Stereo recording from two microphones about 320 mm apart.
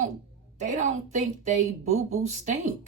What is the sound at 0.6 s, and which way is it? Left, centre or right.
A woman's voice, right.